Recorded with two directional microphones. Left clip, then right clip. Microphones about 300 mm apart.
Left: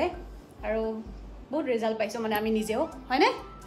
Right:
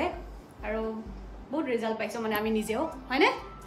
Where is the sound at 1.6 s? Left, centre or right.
Centre.